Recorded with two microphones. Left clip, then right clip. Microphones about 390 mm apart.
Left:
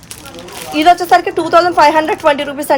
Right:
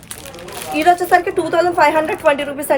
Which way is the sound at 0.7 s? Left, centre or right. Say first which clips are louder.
Left 4 dB; left.